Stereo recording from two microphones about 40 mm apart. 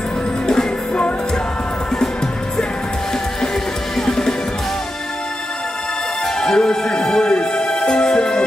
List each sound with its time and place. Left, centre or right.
4.0 s music: centre
6.4 s music: centre